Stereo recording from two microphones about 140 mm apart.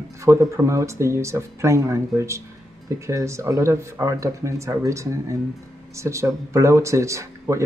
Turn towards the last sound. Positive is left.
turn(degrees=-20)  # may be behind; listen again after turning